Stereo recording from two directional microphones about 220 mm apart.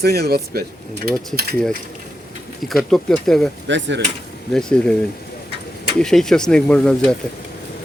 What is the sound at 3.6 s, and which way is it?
Speech, 55° right (ahead or behind).